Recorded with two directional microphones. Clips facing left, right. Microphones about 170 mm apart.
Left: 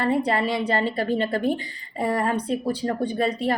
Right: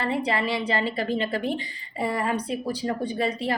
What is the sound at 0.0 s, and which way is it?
A woman's voice, 50° left (ahead or behind).